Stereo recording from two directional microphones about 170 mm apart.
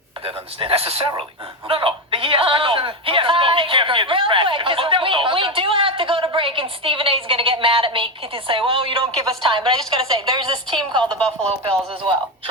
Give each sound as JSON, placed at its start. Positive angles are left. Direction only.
{"t": 0.3, "sound": "a man's voice", "side_deg": -35}
{"t": 1.6, "sound": "a sound", "side_deg": -30}
{"t": 9.2, "sound": "a woman's voice", "side_deg": -30}